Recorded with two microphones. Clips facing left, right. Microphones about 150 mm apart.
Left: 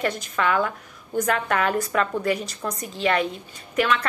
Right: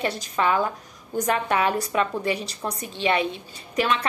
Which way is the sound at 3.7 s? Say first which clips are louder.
Left 1 dB; 30° right (ahead or behind).